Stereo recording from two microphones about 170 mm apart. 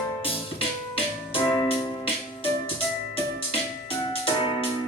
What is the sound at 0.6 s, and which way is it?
Keyboard, 35° left (ahead or behind).